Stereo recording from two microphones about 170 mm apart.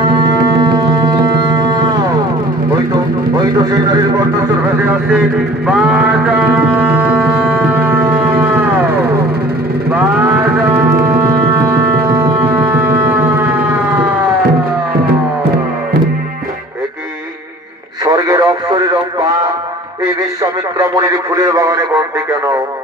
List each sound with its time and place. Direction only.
1.0 s music: 25° right (ahead or behind)
3.3 s a man's voice: 25° right (ahead or behind)
5.7 s music: 5° right (ahead or behind)
10.2 s music: 10° right (ahead or behind)
12.4 s siren: 10° right (ahead or behind)
18.0 s radio: 20° right (ahead or behind)
20.9 s speech: 20° right (ahead or behind)